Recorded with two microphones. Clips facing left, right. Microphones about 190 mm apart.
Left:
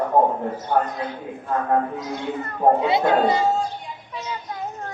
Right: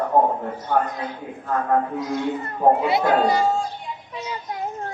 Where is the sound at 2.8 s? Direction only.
25° left (ahead or behind).